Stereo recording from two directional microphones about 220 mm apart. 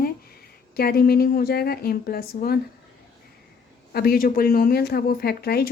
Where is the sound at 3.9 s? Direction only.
45° left (ahead or behind).